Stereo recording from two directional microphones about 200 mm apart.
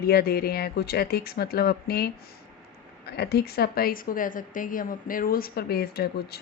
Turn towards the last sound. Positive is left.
turn(degrees=50)  # may be behind; listen again after turning